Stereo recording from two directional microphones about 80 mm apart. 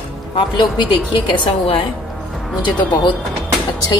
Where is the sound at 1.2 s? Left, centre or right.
Left.